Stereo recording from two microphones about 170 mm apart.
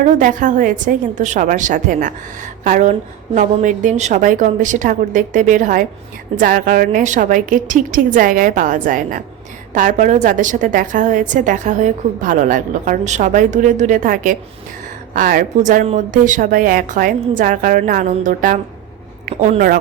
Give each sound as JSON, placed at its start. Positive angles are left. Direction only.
{"t": 0.0, "sound": "a woman's voice", "side_deg": -50}